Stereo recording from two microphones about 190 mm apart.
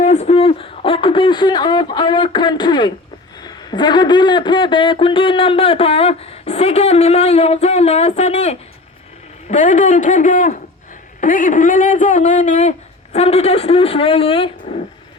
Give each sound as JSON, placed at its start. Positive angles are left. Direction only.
{"t": 0.0, "sound": "speech", "side_deg": 35}